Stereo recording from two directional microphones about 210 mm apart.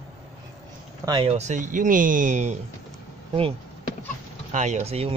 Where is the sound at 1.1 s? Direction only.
25° right (ahead or behind).